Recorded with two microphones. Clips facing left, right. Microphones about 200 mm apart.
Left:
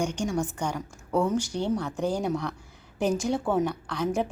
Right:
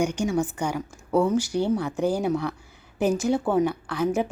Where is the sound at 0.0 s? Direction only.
10° right (ahead or behind).